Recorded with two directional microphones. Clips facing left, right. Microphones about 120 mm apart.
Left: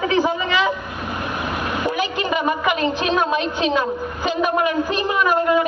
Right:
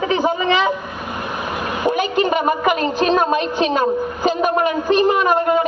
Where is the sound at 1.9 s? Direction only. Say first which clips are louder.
Right 4 dB; 50° right (ahead or behind).